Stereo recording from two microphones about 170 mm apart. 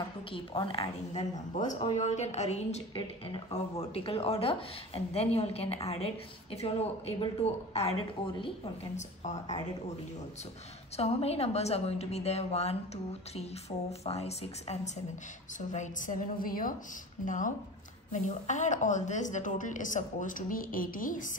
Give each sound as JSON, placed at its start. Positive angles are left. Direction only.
{"t": 0.3, "sound": "a woman's voice", "side_deg": 30}
{"t": 8.9, "sound": "speech", "side_deg": 45}
{"t": 11.0, "sound": "a woman's voice", "side_deg": 35}